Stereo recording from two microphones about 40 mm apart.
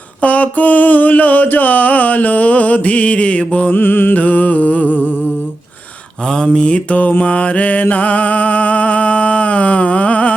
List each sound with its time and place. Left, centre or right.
0.2 s mantra: left
3.8 s music: left
4.1 s mantra: left
6.4 s mantra: left
6.9 s music: left